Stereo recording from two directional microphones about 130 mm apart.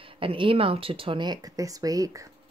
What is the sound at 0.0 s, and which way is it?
Speech, 45° right (ahead or behind).